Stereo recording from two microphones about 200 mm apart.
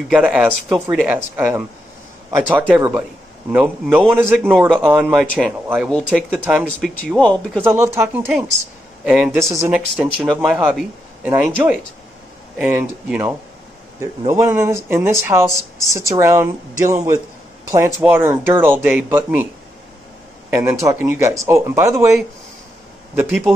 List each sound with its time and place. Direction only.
0.1 s speech: 5° right (ahead or behind)
5.9 s speech: 5° left (ahead or behind)
7.0 s speech: 5° left (ahead or behind)
7.6 s speech: 10° right (ahead or behind)
10.4 s speech: 5° right (ahead or behind)
20.4 s speech: 10° right (ahead or behind)
23.1 s speech: 10° right (ahead or behind)